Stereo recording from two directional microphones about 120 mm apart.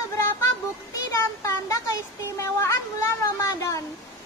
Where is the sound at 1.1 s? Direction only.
25° left (ahead or behind).